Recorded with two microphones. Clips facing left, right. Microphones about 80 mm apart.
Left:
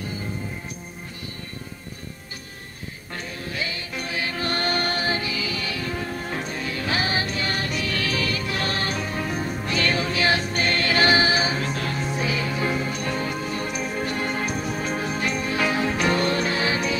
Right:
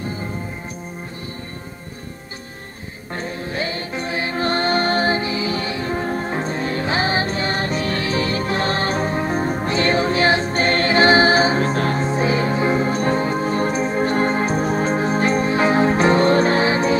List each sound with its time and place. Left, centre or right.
3.2 s music: right